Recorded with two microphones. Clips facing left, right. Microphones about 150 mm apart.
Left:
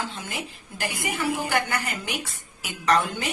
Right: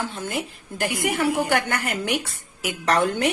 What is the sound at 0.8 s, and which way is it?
A woman's voice, 65° right (ahead or behind).